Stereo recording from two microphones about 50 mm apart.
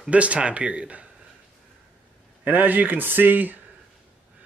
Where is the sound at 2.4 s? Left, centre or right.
Right.